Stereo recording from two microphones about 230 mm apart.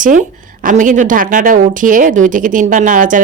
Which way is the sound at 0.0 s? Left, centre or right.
Right.